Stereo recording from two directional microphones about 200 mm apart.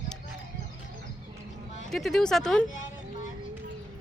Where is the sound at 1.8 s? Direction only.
Centre (ahead or behind).